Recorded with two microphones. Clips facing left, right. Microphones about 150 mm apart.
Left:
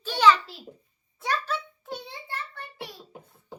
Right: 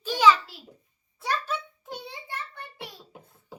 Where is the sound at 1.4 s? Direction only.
10° right (ahead or behind).